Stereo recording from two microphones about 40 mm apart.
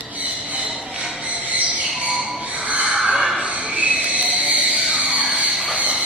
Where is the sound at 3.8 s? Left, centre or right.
Right.